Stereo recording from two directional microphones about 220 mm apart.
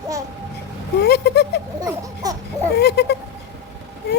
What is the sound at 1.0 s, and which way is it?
Speech, 50° left (ahead or behind).